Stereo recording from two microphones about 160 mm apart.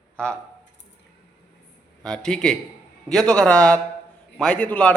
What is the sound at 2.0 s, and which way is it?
A man's voice, 5° left (ahead or behind).